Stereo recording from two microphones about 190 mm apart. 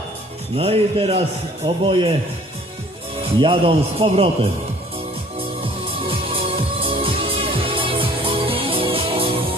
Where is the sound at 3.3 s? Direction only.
30° right (ahead or behind).